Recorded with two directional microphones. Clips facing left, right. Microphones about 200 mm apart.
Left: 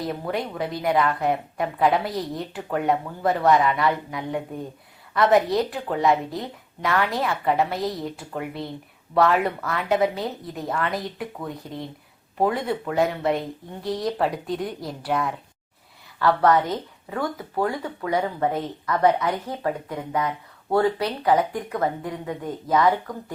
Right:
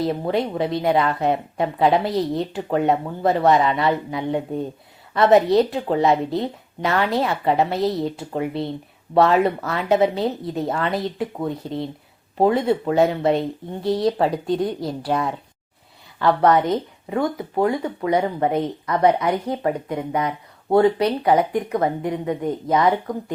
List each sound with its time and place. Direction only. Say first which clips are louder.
0.0 s speech: right 6 dB; 25° right (ahead or behind)